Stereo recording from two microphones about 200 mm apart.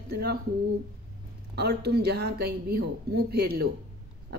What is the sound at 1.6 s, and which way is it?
Speech, 55° right (ahead or behind).